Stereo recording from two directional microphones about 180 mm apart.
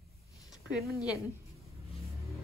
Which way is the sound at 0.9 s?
20° left (ahead or behind).